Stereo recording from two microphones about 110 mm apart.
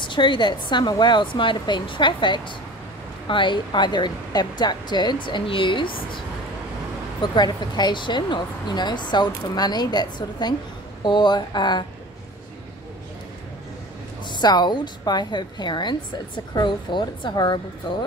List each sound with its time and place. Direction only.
0.0 s speech: 45° left (ahead or behind)
14.2 s speech: 40° left (ahead or behind)